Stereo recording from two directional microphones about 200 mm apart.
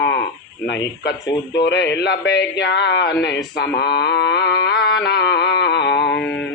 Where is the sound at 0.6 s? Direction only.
60° left (ahead or behind).